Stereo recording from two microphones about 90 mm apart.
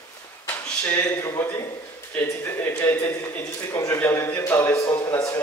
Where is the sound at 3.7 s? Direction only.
35° left (ahead or behind).